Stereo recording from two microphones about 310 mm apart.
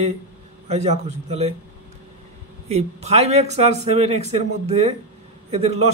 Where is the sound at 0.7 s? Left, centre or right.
Right.